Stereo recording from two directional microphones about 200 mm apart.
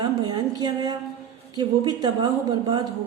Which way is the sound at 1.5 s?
20° right (ahead or behind).